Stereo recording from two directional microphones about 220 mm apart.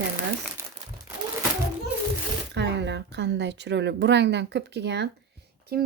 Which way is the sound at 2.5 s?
50° right (ahead or behind).